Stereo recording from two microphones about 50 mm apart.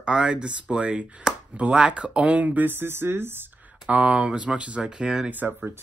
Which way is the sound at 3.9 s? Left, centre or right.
Right.